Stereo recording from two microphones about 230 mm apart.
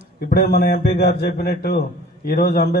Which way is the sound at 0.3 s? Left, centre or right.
Left.